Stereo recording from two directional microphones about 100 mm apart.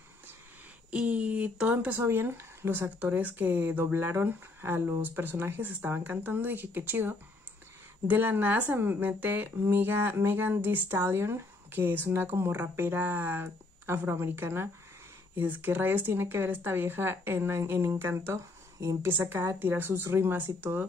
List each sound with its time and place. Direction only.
0.9 s speech: 15° right (ahead or behind)